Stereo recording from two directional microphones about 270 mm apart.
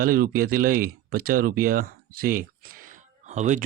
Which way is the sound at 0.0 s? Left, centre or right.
Right.